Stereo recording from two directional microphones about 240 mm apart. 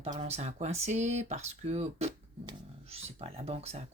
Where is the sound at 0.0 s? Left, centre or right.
Right.